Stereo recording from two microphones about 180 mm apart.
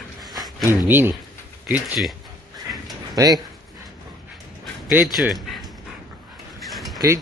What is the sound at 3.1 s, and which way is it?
Speech, 20° right (ahead or behind).